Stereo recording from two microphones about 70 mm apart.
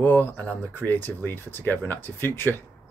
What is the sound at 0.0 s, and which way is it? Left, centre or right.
Speech, left.